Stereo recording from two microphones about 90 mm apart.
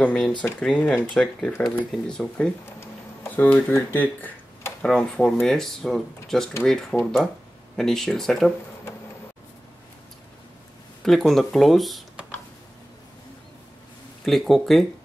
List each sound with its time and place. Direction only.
0.0 s speech: 10° left (ahead or behind)
4.8 s speech: 10° left (ahead or behind)
11.0 s speech: centre (ahead or behind)
14.2 s speech: centre (ahead or behind)